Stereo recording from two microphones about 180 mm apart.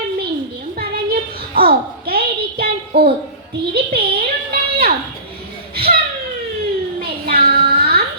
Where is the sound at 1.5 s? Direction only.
60° right (ahead or behind).